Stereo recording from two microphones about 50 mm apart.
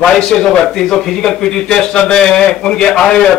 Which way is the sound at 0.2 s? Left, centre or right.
Centre.